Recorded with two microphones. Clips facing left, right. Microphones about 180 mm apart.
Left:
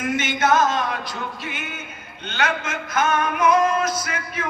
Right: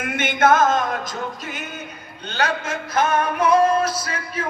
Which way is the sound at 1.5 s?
40° right (ahead or behind).